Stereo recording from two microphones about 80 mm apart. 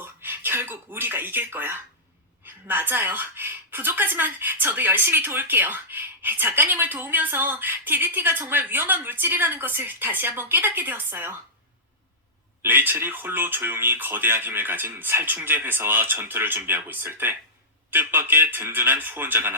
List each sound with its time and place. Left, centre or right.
0.0 s a woman's voice: right
12.6 s a woman's voice: right